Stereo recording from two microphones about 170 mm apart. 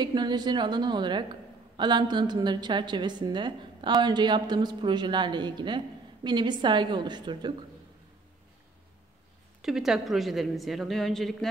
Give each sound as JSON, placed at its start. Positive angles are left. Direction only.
{"t": 0.0, "sound": "speech", "side_deg": -25}
{"t": 9.6, "sound": "a woman's voice", "side_deg": 0}